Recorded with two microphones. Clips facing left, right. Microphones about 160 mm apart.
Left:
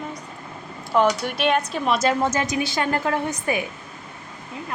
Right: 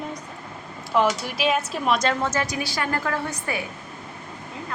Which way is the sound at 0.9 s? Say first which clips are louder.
Left 2 dB; centre (ahead or behind).